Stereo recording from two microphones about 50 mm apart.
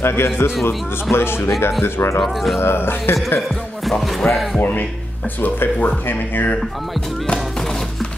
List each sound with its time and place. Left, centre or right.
0.0 s a man's voice: left
1.1 s music: left
1.8 s a man's voice: left
2.2 s speech: centre
2.6 s music: left
4.2 s speech: centre
4.6 s speech: left